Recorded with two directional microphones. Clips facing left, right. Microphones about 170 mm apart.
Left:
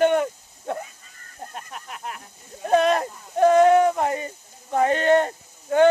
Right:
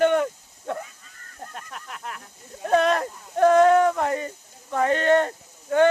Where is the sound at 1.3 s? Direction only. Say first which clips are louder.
Left 2 dB; 15° left (ahead or behind).